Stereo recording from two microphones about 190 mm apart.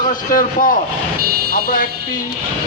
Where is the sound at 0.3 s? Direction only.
45° left (ahead or behind).